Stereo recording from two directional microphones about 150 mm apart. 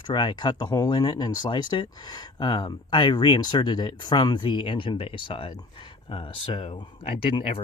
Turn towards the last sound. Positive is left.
turn(degrees=40)  # may be behind; listen again after turning